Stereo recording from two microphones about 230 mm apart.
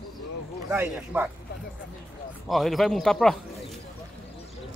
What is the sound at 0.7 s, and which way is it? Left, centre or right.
Speech, centre.